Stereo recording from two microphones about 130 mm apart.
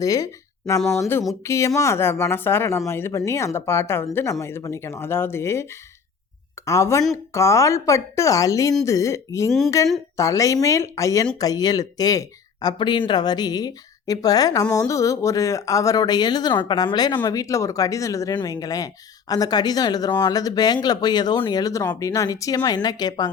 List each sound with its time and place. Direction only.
0.0 s speech: 25° left (ahead or behind)
6.7 s speech: 25° left (ahead or behind)